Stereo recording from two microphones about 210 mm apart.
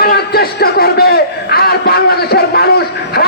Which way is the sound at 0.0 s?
45° left (ahead or behind).